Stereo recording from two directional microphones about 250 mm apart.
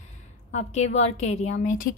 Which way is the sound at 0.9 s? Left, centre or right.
Left.